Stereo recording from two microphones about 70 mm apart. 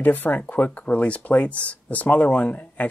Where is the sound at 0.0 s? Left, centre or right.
Left.